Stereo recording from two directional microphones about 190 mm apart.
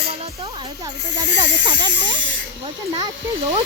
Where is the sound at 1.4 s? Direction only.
25° right (ahead or behind).